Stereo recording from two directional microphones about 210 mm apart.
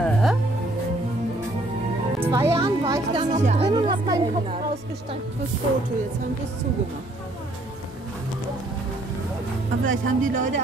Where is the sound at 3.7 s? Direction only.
20° right (ahead or behind).